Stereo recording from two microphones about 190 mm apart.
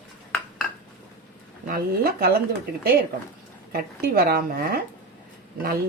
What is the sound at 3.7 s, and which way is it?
Speech, 55° right (ahead or behind).